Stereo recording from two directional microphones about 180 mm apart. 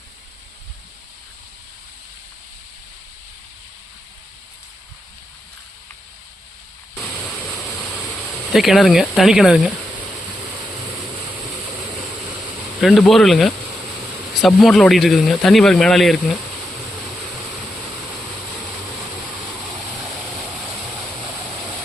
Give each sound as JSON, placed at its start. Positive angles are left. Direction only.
{"t": 8.5, "sound": "speech", "side_deg": 0}
{"t": 12.8, "sound": "speech", "side_deg": 0}